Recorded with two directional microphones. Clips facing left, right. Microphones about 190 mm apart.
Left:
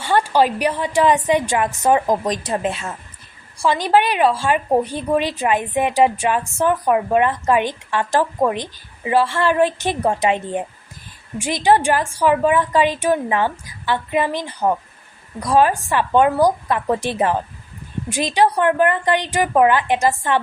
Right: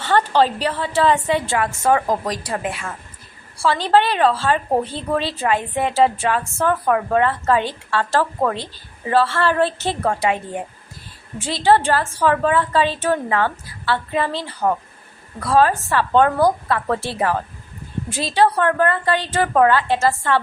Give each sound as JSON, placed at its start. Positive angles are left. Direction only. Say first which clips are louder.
{"t": 0.0, "sound": "a woman's voice", "louder": "even", "side_deg": 10}